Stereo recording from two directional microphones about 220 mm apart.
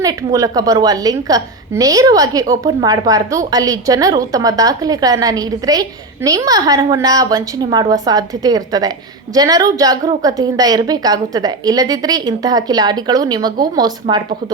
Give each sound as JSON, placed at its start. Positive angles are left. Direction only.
{"t": 0.0, "sound": "a woman's voice", "side_deg": -15}